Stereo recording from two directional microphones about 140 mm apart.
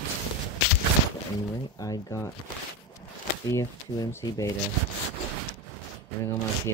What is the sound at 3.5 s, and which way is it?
Speech, 20° left (ahead or behind).